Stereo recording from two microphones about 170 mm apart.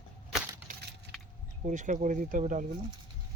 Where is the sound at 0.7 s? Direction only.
50° right (ahead or behind).